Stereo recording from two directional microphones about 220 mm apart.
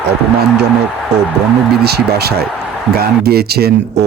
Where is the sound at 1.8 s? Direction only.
45° right (ahead or behind).